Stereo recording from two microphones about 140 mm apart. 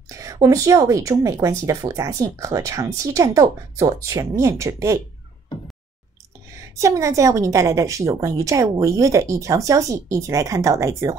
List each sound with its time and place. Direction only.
0.1 s a woman's voice: 20° right (ahead or behind)
6.6 s a woman's voice: 25° right (ahead or behind)